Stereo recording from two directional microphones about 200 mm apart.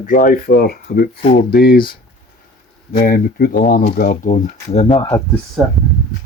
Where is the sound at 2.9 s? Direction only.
45° left (ahead or behind).